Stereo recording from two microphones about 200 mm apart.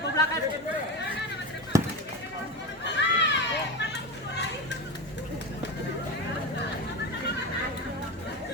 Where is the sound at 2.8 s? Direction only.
60° left (ahead or behind).